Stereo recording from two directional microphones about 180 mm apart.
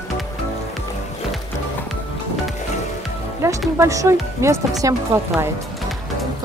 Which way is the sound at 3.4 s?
15° right (ahead or behind).